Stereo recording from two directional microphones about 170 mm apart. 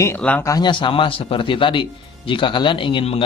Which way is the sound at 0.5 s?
25° left (ahead or behind).